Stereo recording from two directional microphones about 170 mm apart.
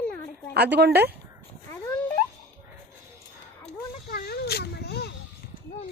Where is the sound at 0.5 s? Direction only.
75° right (ahead or behind).